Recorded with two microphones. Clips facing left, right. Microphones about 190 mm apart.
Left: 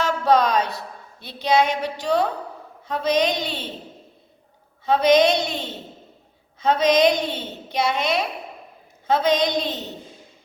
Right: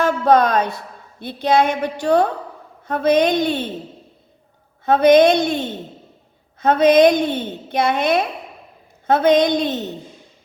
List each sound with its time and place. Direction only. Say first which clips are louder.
0.0 s a sound: right 4 dB; 55° right (ahead or behind)
1.2 s a woman's voice: right 3 dB; 55° right (ahead or behind)
4.9 s a woman's voice: right 5 dB; 55° right (ahead or behind)